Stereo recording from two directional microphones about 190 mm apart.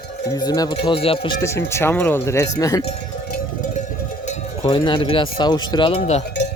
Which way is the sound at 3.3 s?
45° left (ahead or behind).